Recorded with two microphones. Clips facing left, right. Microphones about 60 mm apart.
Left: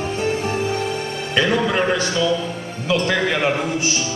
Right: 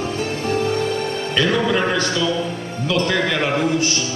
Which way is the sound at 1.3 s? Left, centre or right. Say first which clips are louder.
Left 1 dB; centre.